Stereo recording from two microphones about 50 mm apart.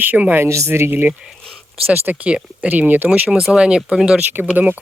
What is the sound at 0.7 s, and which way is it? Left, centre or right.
Speech, right.